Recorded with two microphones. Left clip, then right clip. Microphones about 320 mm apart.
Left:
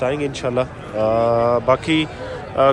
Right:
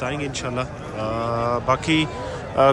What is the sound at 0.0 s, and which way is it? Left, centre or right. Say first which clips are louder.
A man's voice: left 6 dB; centre.